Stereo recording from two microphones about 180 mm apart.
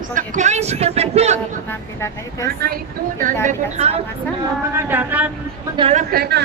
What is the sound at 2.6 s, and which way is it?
Speech, 50° right (ahead or behind).